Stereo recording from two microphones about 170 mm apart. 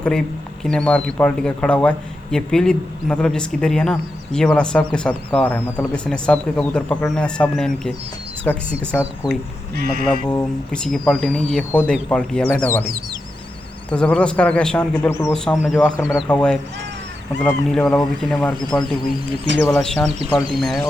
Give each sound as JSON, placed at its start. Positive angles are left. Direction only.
{"t": 0.6, "sound": "a man's voice", "side_deg": 5}
{"t": 9.0, "sound": "speech", "side_deg": -5}
{"t": 9.7, "sound": "speech", "side_deg": -60}
{"t": 10.2, "sound": "a man's voice", "side_deg": 5}
{"t": 13.9, "sound": "a man's voice", "side_deg": 5}
{"t": 15.5, "sound": "speech", "side_deg": 0}